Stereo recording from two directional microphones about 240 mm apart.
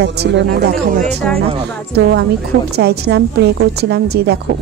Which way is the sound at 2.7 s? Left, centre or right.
Right.